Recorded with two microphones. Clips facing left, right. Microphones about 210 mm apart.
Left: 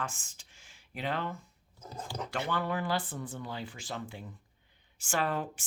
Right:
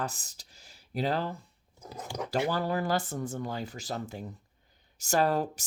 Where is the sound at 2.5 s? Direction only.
35° right (ahead or behind).